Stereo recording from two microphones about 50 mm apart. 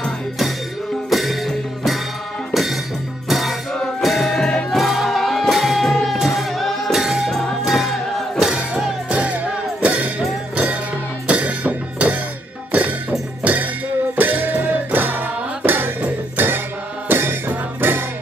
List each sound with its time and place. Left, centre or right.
1.1 s music: centre
2.5 s music: centre
9.1 s music: right
13.4 s music: right